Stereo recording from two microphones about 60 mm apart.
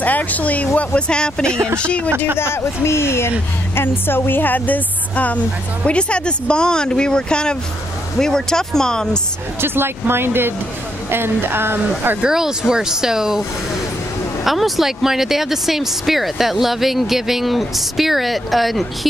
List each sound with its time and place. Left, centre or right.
0.0 s speech: left
2.3 s a woman's voice: left; by 9.2 s centre
9.6 s speech: right
12.2 s speech: centre
14.4 s speech: centre